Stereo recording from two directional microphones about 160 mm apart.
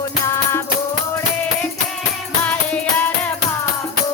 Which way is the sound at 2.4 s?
10° left (ahead or behind).